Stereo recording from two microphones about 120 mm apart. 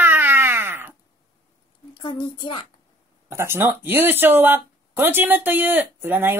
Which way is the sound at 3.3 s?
20° right (ahead or behind).